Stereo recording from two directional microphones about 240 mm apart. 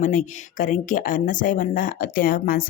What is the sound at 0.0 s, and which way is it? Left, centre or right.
Speech, left.